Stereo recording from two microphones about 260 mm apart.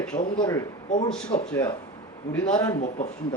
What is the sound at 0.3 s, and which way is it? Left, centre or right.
Speech, centre.